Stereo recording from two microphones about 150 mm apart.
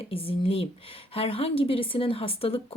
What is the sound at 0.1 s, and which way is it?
Speech, 40° left (ahead or behind).